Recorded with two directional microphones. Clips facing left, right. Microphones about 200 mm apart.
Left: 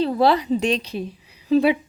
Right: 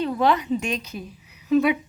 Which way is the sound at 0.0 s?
35° left (ahead or behind).